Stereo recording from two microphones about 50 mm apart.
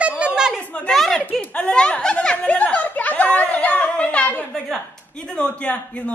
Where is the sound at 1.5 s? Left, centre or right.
Left.